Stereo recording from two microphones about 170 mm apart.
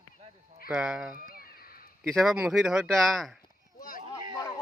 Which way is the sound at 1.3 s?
60° left (ahead or behind).